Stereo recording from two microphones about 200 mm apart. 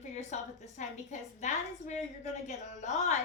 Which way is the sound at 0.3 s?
35° left (ahead or behind).